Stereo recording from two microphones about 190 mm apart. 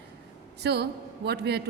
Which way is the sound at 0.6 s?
60° right (ahead or behind).